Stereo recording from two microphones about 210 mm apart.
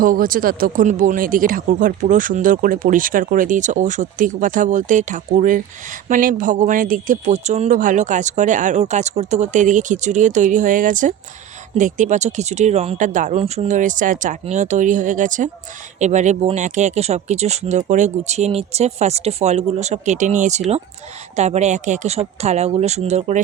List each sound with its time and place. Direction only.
0.0 s speech: 40° right (ahead or behind)